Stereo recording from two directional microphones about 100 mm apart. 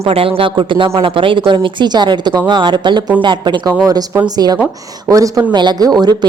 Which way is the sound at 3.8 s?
40° right (ahead or behind).